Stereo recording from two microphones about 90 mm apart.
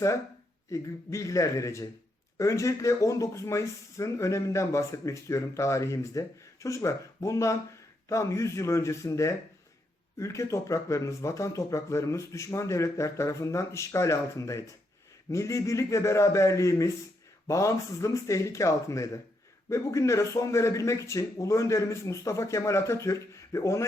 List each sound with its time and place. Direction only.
0.7 s speech: 35° left (ahead or behind)